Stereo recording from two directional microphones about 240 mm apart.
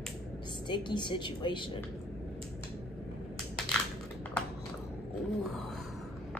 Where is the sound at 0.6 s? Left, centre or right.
Centre.